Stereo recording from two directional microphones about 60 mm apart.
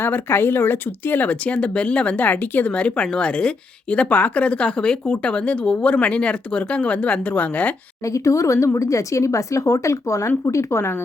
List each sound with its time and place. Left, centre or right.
0.0 s speech: left
8.0 s speech: left